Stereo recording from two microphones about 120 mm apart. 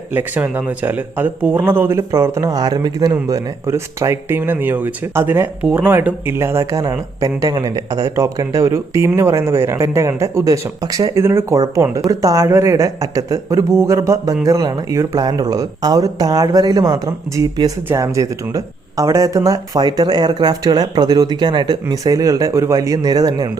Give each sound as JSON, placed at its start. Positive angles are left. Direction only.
{"t": 0.1, "sound": "speech", "side_deg": -15}